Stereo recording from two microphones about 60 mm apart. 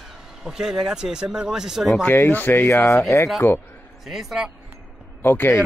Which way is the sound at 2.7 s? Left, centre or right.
Left.